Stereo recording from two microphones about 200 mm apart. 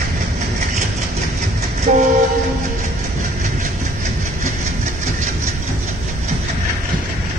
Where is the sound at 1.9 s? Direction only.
35° right (ahead or behind).